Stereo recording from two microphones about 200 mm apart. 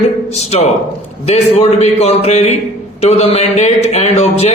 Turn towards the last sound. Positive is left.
turn(degrees=30)  # may be behind; listen again after turning